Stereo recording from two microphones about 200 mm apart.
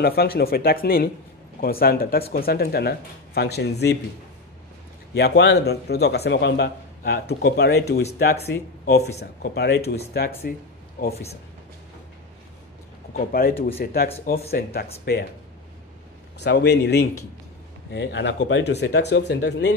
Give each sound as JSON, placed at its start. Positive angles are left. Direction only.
{"t": 0.0, "sound": "speech", "side_deg": 50}
{"t": 5.1, "sound": "a man's voice", "side_deg": 55}
{"t": 13.1, "sound": "speech", "side_deg": 45}
{"t": 16.3, "sound": "a man's voice", "side_deg": 55}